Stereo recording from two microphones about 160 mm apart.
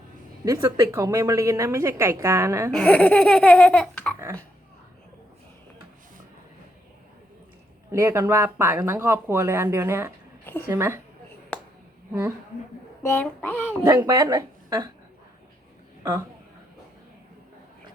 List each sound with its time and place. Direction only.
0.4 s a woman's voice: 20° right (ahead or behind)
2.7 s laughter: 10° left (ahead or behind)
7.9 s speech: 15° right (ahead or behind)
10.4 s a woman's voice: 10° left (ahead or behind)
10.7 s speech: 15° right (ahead or behind)
11.5 s a sound: 10° left (ahead or behind)
13.0 s laughter: 15° left (ahead or behind)
13.8 s a woman's voice: 20° right (ahead or behind)